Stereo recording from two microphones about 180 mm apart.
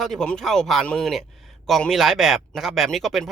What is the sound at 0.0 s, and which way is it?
Speech, centre (ahead or behind).